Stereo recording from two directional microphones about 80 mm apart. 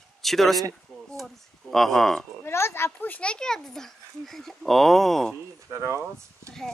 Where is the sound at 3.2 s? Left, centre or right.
Centre.